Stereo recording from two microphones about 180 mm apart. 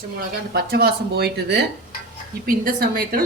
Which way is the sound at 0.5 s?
60° right (ahead or behind).